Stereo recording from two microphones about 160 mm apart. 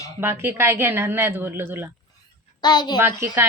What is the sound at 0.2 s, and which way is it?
A woman's voice, 15° right (ahead or behind).